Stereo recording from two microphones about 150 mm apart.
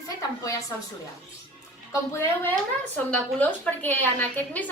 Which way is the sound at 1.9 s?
15° left (ahead or behind).